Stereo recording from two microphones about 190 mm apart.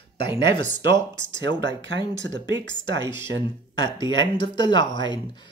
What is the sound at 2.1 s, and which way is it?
Speech, 75° right (ahead or behind).